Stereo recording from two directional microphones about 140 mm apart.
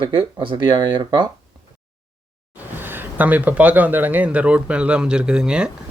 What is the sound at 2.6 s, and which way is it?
Speech, 15° right (ahead or behind).